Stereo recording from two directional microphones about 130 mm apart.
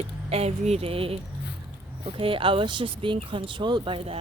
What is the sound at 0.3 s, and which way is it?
Speech, 50° right (ahead or behind).